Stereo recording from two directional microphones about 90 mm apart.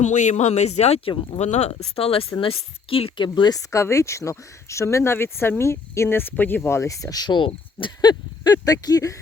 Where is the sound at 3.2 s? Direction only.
55° left (ahead or behind).